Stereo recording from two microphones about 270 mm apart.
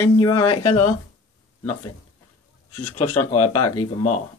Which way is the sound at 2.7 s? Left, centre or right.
Left.